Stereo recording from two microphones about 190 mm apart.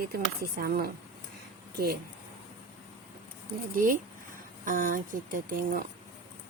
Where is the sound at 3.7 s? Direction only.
45° right (ahead or behind).